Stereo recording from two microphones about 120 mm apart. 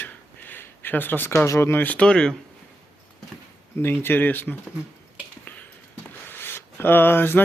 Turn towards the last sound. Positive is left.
turn(degrees=20)  # may be behind; listen again after turning